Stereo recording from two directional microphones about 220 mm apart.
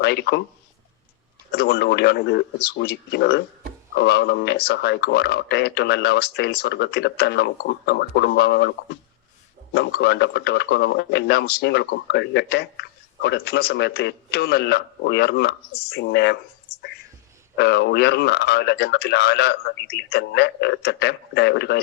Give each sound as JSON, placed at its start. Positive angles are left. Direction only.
{"t": 0.0, "sound": "speech", "side_deg": 50}
{"t": 1.5, "sound": "speech", "side_deg": 45}
{"t": 17.6, "sound": "speech", "side_deg": 50}